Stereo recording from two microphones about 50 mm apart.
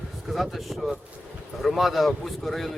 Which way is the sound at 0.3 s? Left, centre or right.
Centre.